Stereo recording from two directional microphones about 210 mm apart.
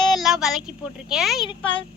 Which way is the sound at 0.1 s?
Centre (ahead or behind).